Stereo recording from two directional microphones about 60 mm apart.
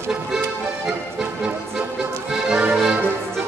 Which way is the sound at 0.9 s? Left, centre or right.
Centre.